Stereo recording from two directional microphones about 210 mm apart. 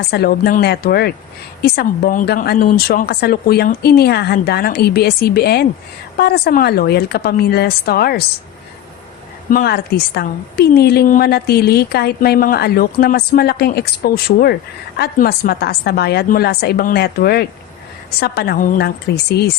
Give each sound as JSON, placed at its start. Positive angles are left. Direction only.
{"t": 0.1, "sound": "a woman's voice", "side_deg": 50}
{"t": 9.5, "sound": "a woman's voice", "side_deg": 45}